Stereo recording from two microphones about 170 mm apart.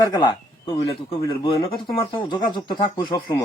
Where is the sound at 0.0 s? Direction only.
25° left (ahead or behind).